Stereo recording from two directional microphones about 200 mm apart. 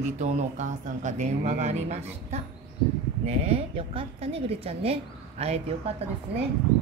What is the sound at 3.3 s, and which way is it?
A woman's voice, 30° right (ahead or behind).